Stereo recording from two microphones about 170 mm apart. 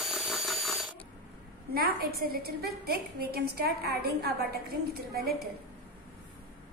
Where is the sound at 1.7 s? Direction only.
60° right (ahead or behind).